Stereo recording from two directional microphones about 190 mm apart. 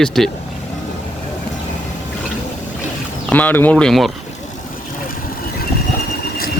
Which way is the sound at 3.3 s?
10° left (ahead or behind).